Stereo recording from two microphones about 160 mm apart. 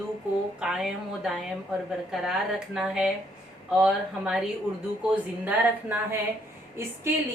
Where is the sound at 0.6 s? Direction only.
5° right (ahead or behind).